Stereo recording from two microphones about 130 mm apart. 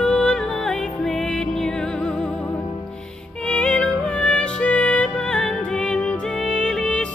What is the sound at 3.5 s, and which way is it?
Music, 10° left (ahead or behind).